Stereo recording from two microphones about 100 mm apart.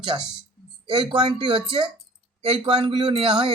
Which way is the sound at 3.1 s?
60° right (ahead or behind).